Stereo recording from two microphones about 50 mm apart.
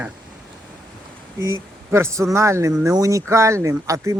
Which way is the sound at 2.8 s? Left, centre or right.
Right.